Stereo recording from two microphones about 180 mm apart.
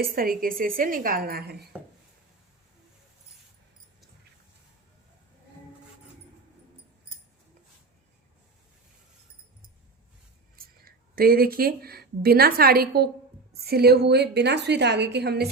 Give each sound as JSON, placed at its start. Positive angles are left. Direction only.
{"t": 0.0, "sound": "a woman's voice", "side_deg": -55}
{"t": 10.8, "sound": "a woman's voice", "side_deg": -55}